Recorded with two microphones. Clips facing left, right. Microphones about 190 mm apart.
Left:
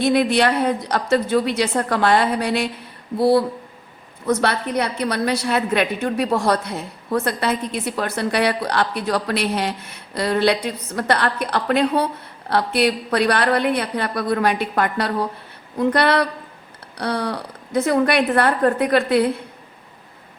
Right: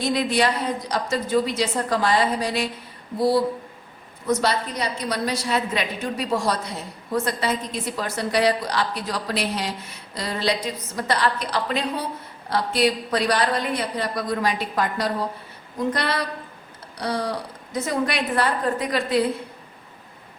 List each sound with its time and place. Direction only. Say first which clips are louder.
0.0 s a woman's voice: left 5 dB; 60° left (ahead or behind)